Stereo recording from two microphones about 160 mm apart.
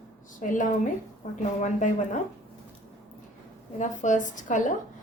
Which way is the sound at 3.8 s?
50° left (ahead or behind).